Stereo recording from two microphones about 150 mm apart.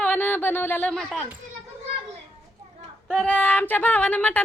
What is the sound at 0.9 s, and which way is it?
Speech, 5° left (ahead or behind).